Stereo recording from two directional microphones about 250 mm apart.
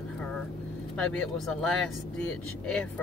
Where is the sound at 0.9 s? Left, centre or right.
Centre.